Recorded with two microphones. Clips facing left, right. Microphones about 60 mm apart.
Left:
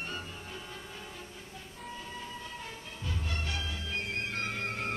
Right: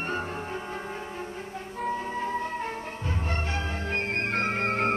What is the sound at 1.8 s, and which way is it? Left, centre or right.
Music, right.